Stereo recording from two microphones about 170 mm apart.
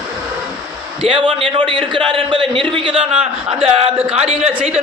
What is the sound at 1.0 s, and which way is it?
A man's voice, 30° right (ahead or behind).